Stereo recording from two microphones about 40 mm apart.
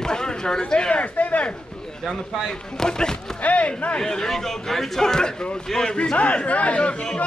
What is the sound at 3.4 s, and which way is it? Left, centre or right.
Speech, left.